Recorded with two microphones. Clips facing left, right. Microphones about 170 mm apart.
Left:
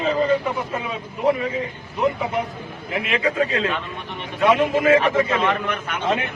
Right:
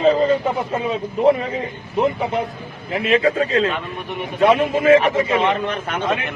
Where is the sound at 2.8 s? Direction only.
35° right (ahead or behind).